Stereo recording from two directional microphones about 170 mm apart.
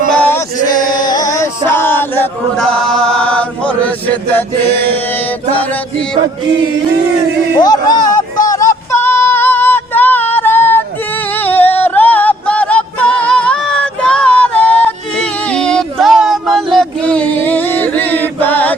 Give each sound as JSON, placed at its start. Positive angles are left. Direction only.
{"t": 0.1, "sound": "male singing", "side_deg": 10}
{"t": 0.8, "sound": "male singing", "side_deg": 25}
{"t": 2.6, "sound": "chant", "side_deg": 5}
{"t": 7.6, "sound": "speech", "side_deg": 25}
{"t": 8.4, "sound": "music", "side_deg": 20}
{"t": 16.7, "sound": "chant", "side_deg": 5}